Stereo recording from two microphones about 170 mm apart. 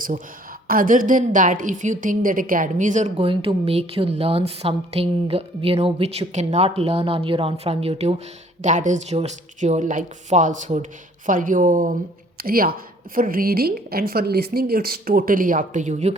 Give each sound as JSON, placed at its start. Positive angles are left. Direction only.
{"t": 0.7, "sound": "a woman's voice", "side_deg": -55}
{"t": 8.6, "sound": "a woman's voice", "side_deg": -50}